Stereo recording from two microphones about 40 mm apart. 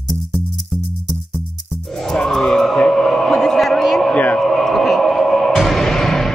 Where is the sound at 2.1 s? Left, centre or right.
Centre.